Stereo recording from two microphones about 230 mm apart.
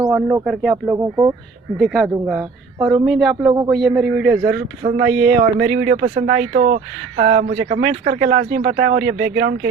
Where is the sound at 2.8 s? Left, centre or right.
Centre.